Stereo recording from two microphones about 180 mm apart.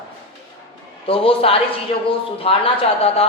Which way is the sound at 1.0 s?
30° left (ahead or behind).